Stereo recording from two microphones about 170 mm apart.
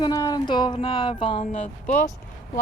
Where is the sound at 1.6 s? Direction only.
45° left (ahead or behind).